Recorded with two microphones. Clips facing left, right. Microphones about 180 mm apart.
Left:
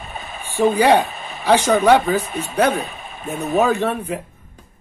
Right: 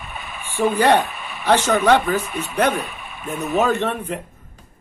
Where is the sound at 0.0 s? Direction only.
40° left (ahead or behind).